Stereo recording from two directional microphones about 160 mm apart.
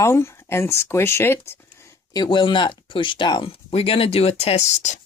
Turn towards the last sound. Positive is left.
turn(degrees=45)  # may be behind; listen again after turning